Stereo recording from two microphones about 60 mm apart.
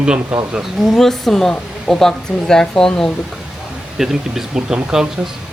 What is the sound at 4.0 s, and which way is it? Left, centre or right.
A man's voice, centre.